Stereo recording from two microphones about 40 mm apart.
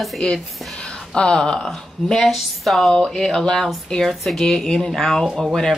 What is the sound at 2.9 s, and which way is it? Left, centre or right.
Speech, centre.